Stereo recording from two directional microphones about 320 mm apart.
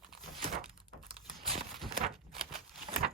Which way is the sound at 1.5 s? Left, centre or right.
Centre.